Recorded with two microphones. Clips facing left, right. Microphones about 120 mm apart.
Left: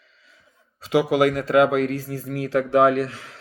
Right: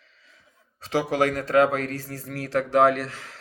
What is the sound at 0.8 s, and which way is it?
Speech, 35° right (ahead or behind).